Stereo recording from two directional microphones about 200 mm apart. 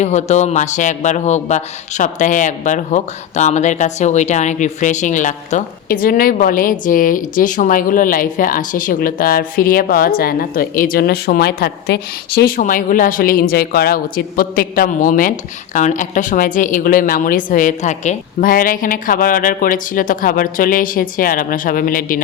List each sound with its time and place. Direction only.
0.0 s speech: 35° left (ahead or behind)